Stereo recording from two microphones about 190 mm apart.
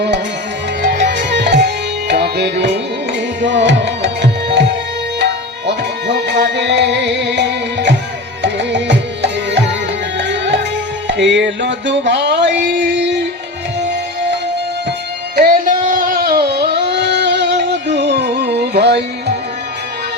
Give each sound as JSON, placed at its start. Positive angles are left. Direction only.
{"t": 0.8, "sound": "music", "side_deg": -60}
{"t": 1.6, "sound": "tabla", "side_deg": -60}
{"t": 3.4, "sound": "music", "side_deg": -70}
{"t": 15.4, "sound": "a sound", "side_deg": -45}